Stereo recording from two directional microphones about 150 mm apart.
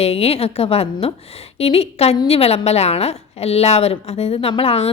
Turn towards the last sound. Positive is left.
turn(degrees=40)  # may be behind; listen again after turning